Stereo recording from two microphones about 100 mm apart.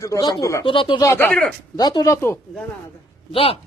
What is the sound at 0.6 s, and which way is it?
Speech, 60° left (ahead or behind).